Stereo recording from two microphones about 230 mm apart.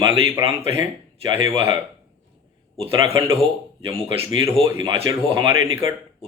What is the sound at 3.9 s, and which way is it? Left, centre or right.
Speech, centre.